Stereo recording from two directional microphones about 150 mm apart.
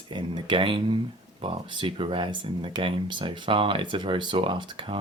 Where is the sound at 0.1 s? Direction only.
30° right (ahead or behind).